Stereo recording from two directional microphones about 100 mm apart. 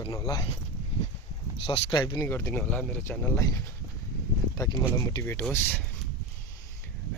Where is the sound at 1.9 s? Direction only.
45° left (ahead or behind).